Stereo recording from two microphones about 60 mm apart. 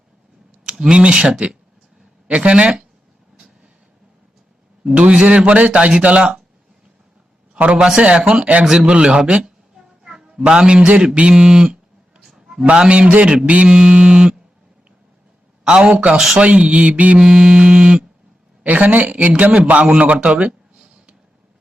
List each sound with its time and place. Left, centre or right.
0.6 s speech: centre
4.9 s speech: right
7.5 s a man's voice: centre
7.9 s mantra: centre
8.3 s speech: centre
8.8 s mantra: centre
10.0 s a sound: centre
10.4 s a man's voice: centre
12.2 s a sound: centre
12.6 s mantra: centre
15.8 s speech: right
16.1 s mantra: centre
16.4 s mantra: centre
18.6 s a man's voice: right